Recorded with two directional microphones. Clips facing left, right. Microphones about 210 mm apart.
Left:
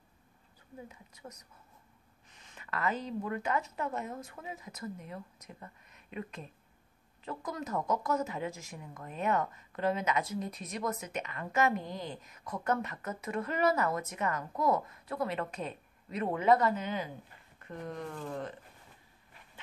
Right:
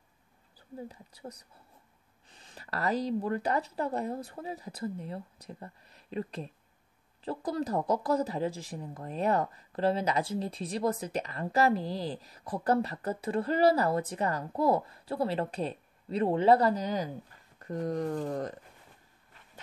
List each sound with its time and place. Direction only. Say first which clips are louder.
0.6 s a woman's voice: right 6 dB; 35° right (ahead or behind)